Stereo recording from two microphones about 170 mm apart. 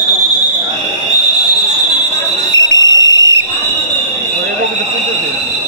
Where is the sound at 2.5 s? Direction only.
90° right.